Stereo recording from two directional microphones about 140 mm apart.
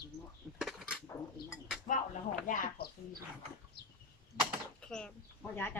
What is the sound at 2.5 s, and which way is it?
Speech, 80° left.